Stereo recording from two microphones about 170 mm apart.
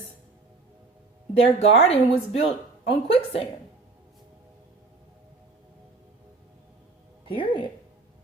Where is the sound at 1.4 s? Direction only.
35° left (ahead or behind).